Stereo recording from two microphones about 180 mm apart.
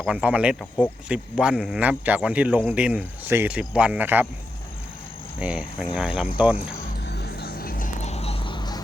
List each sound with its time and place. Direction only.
0.0 s a man's voice: 5° right (ahead or behind)
5.4 s cricket: 5° right (ahead or behind)
6.3 s a man's voice: 10° right (ahead or behind)
7.0 s music: 65° left (ahead or behind)
8.0 s a sound: 35° left (ahead or behind)